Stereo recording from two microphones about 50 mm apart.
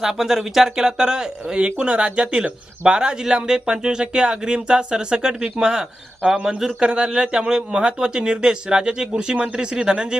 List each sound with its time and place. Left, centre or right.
0.0 s speech: centre